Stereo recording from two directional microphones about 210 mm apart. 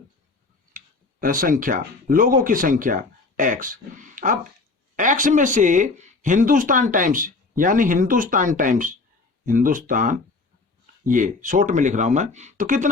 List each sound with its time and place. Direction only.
1.2 s speech: 40° right (ahead or behind)